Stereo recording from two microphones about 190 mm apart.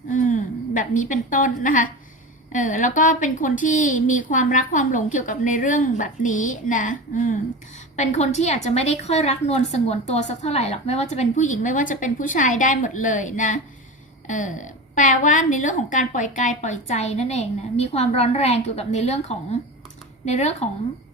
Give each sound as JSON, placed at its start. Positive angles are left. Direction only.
{"t": 0.1, "sound": "a woman's voice", "side_deg": 40}